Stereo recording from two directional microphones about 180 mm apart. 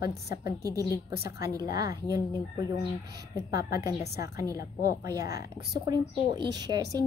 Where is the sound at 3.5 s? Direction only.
20° right (ahead or behind).